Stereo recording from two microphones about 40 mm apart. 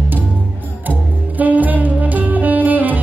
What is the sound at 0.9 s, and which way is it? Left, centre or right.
Saxophone, right.